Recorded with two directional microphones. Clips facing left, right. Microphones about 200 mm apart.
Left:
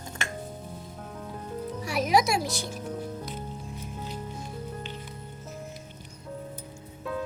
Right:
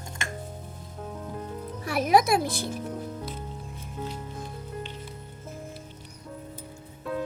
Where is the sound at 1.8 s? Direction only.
55° right (ahead or behind).